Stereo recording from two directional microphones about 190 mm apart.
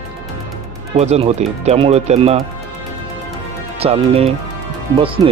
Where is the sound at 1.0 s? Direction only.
35° right (ahead or behind).